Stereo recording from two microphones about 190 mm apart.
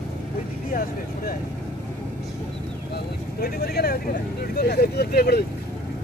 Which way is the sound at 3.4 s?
55° left (ahead or behind).